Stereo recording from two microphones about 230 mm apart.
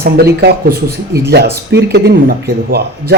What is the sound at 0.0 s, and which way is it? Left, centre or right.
A man's voice, right.